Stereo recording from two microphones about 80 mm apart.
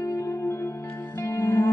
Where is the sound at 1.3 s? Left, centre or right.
Left.